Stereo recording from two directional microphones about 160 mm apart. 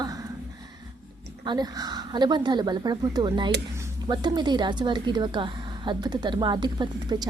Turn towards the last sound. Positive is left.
turn(degrees=-25)  # may be behind; listen again after turning